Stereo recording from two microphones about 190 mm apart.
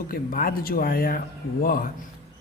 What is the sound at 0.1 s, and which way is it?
Speech, 50° left (ahead or behind).